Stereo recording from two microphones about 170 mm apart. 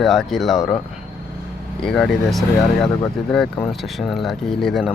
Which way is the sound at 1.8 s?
5° left (ahead or behind).